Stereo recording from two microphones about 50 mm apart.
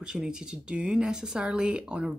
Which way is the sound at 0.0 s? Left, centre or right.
Centre.